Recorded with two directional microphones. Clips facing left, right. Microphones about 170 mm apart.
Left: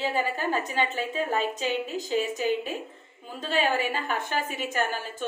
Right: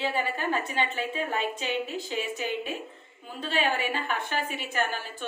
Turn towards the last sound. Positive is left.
turn(degrees=45)  # may be behind; listen again after turning